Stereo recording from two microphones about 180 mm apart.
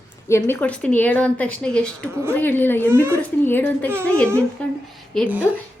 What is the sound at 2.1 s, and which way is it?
Speech, 15° right (ahead or behind).